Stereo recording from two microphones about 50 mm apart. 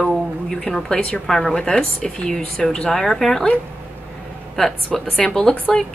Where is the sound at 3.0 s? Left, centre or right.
Centre.